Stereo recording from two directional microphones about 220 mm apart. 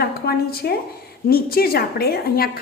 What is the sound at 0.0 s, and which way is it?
A woman's voice, 45° left (ahead or behind).